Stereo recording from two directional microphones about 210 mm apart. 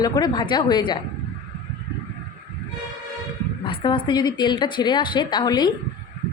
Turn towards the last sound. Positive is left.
turn(degrees=20)  # may be behind; listen again after turning